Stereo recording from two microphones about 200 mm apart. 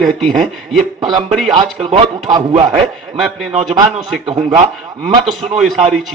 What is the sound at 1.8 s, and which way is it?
Speech, 25° right (ahead or behind).